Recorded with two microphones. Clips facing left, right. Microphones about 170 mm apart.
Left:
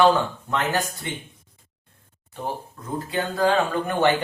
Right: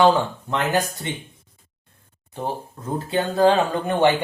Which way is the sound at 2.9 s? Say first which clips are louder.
Right 4 dB; 30° right (ahead or behind).